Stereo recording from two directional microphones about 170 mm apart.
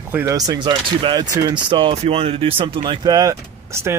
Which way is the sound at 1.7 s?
30° right (ahead or behind).